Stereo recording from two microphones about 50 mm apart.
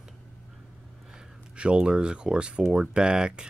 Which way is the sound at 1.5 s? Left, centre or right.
Centre.